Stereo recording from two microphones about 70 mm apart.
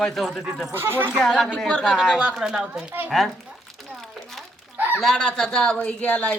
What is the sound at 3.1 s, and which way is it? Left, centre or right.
Speech, centre.